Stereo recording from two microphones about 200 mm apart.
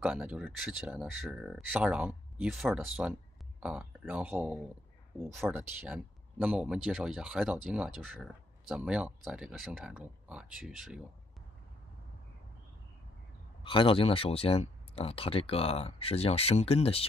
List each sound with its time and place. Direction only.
0.0 s speech: 5° right (ahead or behind)
13.6 s speech: 25° left (ahead or behind)